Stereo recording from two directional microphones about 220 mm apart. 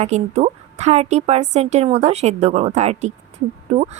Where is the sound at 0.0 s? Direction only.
30° right (ahead or behind).